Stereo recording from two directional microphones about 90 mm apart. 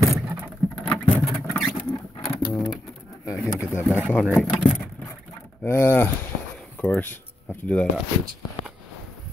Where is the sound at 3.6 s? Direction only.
30° left (ahead or behind).